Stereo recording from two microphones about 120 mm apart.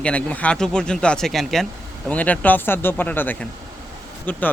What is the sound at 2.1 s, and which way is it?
Speech, 10° left (ahead or behind).